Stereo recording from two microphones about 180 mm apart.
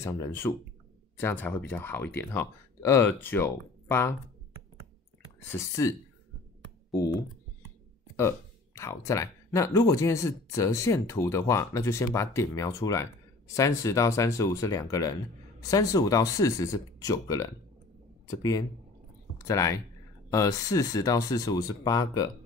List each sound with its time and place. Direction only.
0.0 s speech: 15° left (ahead or behind)
5.5 s speech: 15° left (ahead or behind)